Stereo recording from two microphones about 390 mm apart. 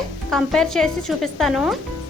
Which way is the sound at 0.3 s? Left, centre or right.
Centre.